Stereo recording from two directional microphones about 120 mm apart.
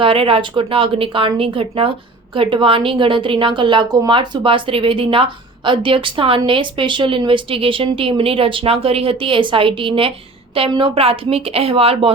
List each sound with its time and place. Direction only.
0.0 s speech: 50° right (ahead or behind)